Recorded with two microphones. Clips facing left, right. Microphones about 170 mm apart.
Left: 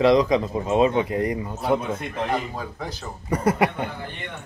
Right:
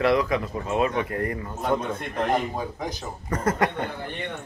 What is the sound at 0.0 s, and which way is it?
A man's voice, 20° left (ahead or behind).